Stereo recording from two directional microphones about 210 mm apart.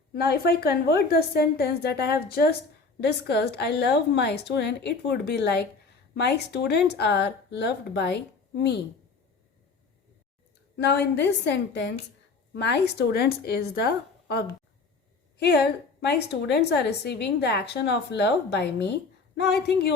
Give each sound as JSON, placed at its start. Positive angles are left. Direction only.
{"t": 0.1, "sound": "a woman's voice", "side_deg": 45}
{"t": 10.8, "sound": "a woman's voice", "side_deg": 55}